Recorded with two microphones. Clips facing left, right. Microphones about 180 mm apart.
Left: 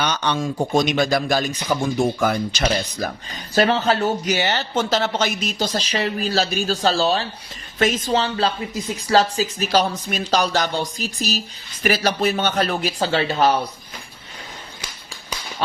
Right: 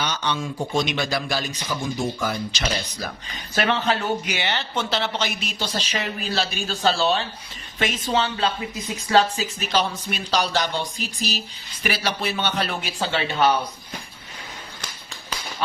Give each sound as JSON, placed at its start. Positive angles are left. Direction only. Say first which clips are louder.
{"t": 0.0, "sound": "speech", "louder": "left 4 dB", "side_deg": 60}